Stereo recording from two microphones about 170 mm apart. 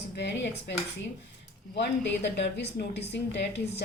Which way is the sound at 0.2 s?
90° left.